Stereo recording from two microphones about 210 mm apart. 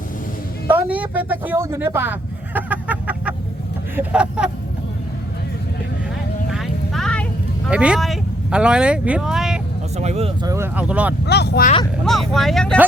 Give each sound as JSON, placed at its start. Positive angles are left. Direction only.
{"t": 0.7, "sound": "a sound", "side_deg": -5}
{"t": 3.9, "sound": "speech", "side_deg": -5}
{"t": 6.5, "sound": "a sound", "side_deg": 0}
{"t": 7.7, "sound": "speech", "side_deg": -5}
{"t": 10.0, "sound": "speech", "side_deg": -30}
{"t": 10.5, "sound": "speech", "side_deg": -10}
{"t": 11.3, "sound": "speech", "side_deg": 50}
{"t": 12.0, "sound": "speech", "side_deg": 0}